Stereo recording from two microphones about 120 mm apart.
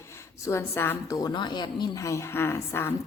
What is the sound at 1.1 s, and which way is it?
Speech, 35° left (ahead or behind).